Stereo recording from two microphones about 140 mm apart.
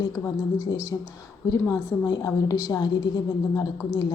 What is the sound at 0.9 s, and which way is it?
A woman's voice, 20° left (ahead or behind).